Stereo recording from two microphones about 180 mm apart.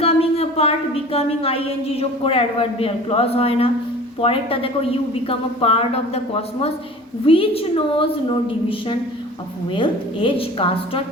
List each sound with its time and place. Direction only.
0.0 s a woman's voice: 35° left (ahead or behind)